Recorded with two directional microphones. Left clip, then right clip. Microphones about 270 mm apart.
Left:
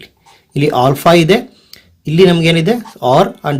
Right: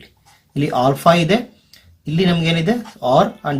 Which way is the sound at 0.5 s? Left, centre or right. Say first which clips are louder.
Left 5 dB; left.